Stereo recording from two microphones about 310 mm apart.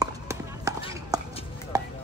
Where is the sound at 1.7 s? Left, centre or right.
Centre.